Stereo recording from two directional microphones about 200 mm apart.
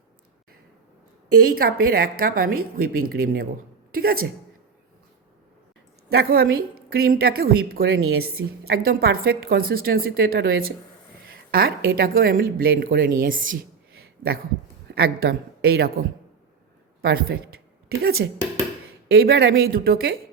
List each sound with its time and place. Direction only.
1.5 s a woman's voice: 45° right (ahead or behind)
6.1 s a woman's voice: 50° right (ahead or behind)
14.8 s a woman's voice: 50° right (ahead or behind)